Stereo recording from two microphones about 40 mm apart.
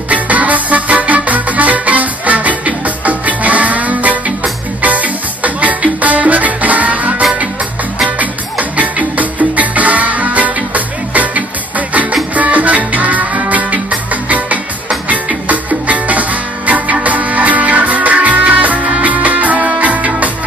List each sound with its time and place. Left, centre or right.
0.1 s music: right